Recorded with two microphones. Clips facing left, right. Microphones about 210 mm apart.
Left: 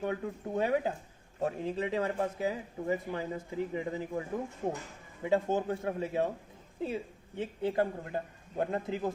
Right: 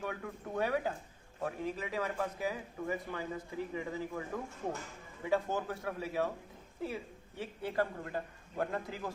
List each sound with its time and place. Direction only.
0.0 s speech: 25° left (ahead or behind)
5.2 s speech: 20° left (ahead or behind)